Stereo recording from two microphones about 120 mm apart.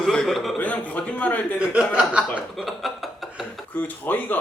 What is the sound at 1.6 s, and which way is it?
Speech, 5° right (ahead or behind).